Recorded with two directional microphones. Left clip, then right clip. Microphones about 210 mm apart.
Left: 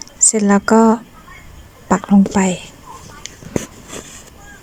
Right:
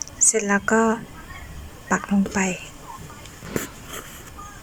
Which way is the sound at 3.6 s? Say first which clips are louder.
Left 5 dB; 15° left (ahead or behind).